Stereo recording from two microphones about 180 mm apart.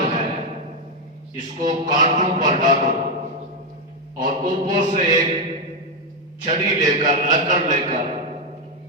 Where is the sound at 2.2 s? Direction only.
45° right (ahead or behind).